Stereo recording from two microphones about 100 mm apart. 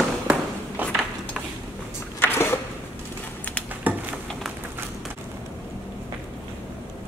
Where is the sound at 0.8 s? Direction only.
20° right (ahead or behind).